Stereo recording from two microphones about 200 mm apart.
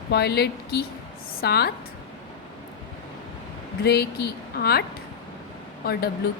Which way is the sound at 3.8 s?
50° left (ahead or behind).